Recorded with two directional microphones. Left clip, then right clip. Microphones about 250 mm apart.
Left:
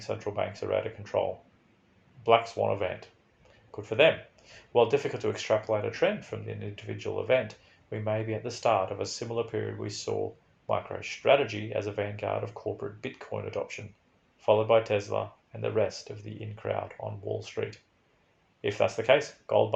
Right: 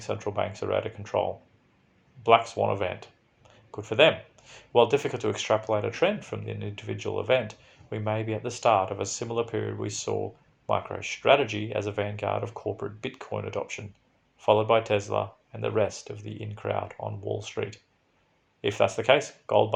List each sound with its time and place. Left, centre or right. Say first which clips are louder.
0.0 s speech: right 2 dB; right